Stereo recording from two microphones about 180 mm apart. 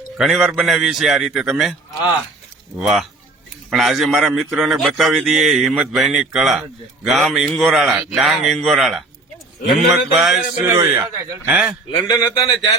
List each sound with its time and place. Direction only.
0.2 s a man's voice: centre (ahead or behind)
2.7 s a man's voice: centre (ahead or behind)
10.7 s speech: 15° right (ahead or behind)
12.0 s speech: 20° left (ahead or behind)